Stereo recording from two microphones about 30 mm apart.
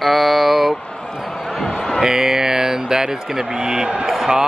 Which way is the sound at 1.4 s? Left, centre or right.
Centre.